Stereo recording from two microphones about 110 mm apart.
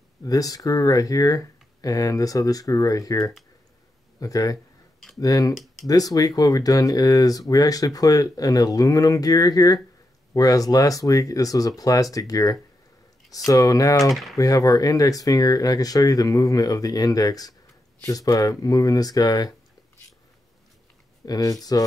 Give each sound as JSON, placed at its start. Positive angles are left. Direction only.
{"t": 0.2, "sound": "speech", "side_deg": 35}
{"t": 14.1, "sound": "speech", "side_deg": 0}
{"t": 14.4, "sound": "speech", "side_deg": 30}
{"t": 21.3, "sound": "speech", "side_deg": 35}